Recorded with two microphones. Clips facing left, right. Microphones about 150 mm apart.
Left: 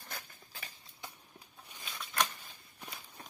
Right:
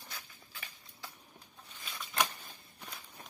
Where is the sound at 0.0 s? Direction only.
55° left (ahead or behind).